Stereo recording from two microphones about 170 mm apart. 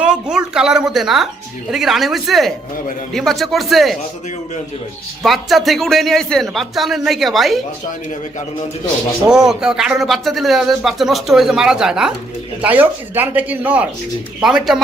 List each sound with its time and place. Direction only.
0.0 s speech: 5° right (ahead or behind)
5.2 s speech: centre (ahead or behind)
9.3 s speech: 5° right (ahead or behind)